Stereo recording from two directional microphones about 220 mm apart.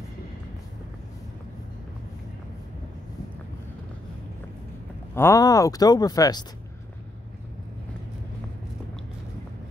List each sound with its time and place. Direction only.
5.1 s speech: 10° left (ahead or behind)